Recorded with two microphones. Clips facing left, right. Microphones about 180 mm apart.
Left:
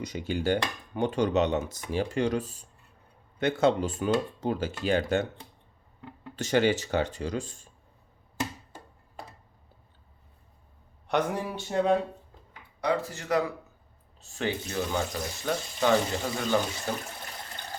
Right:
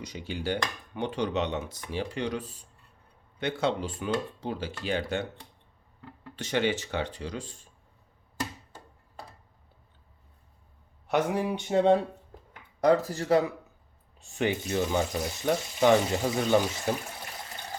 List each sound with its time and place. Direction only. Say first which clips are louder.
0.0 s speech: left 5 dB; 50° left (ahead or behind)
6.3 s speech: left 4 dB; 40° left (ahead or behind)
11.1 s speech: right 2 dB; 10° right (ahead or behind)
12.8 s speech: right 5 dB; 40° right (ahead or behind)
14.2 s speech: right 3 dB; 15° right (ahead or behind)